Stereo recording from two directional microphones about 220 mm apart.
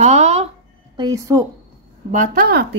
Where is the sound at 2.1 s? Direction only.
40° right (ahead or behind).